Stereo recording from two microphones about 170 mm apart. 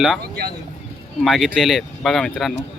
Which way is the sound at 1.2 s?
Centre (ahead or behind).